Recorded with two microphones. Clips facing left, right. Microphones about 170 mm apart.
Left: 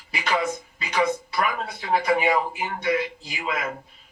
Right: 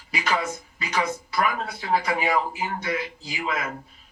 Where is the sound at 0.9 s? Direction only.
25° left (ahead or behind).